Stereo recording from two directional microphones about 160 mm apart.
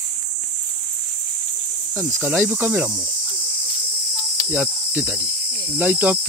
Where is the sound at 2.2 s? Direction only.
10° right (ahead or behind).